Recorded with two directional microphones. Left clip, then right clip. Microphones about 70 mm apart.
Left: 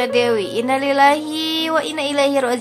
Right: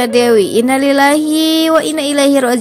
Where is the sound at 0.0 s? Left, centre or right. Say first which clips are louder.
Right 7 dB; right.